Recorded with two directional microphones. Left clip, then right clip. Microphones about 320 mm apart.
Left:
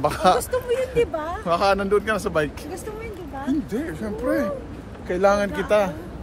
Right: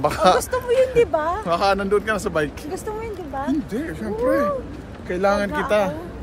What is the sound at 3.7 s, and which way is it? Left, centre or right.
Speech, centre.